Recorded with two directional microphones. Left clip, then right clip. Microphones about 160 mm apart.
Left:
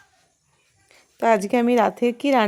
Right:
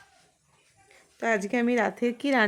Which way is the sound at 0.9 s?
25° left (ahead or behind).